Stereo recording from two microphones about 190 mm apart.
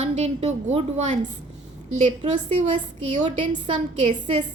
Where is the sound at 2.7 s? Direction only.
35° right (ahead or behind).